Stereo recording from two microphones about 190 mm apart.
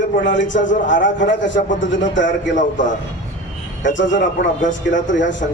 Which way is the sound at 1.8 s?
75° left (ahead or behind).